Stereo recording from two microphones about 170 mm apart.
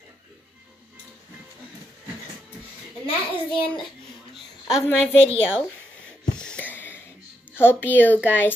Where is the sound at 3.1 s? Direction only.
30° left (ahead or behind).